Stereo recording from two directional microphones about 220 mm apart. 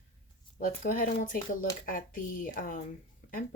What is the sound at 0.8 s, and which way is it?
Speech, 40° left (ahead or behind).